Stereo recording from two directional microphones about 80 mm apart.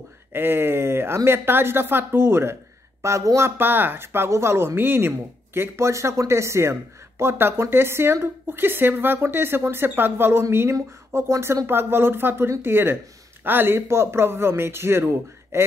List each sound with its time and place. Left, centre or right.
0.3 s speech: right